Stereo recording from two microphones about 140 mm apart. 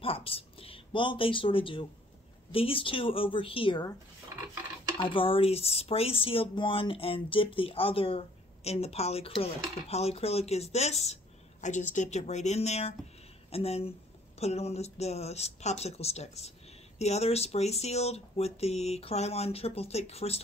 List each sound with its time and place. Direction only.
0.0 s a woman's voice: 40° left (ahead or behind)
4.9 s speech: 40° left (ahead or behind)
11.6 s speech: 60° left (ahead or behind)